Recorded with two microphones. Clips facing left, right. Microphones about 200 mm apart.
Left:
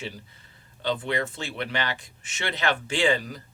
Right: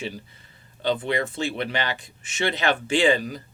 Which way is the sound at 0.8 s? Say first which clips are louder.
Right 3 dB; 15° right (ahead or behind).